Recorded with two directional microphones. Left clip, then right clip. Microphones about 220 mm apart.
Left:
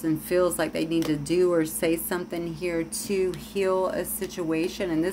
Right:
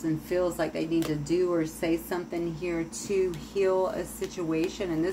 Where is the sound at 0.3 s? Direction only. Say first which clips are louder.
Left 4 dB; 45° left (ahead or behind).